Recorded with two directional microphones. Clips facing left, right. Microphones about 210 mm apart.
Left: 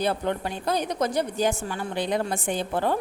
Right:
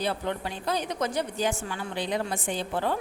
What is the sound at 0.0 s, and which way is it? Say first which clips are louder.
A woman's voice: left 4 dB; 50° left (ahead or behind).